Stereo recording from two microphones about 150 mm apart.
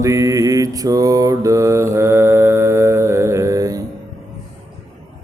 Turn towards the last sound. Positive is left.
turn(degrees=-20)  # may be behind; listen again after turning